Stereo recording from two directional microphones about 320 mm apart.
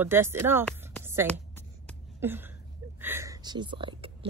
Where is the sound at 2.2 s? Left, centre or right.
Centre.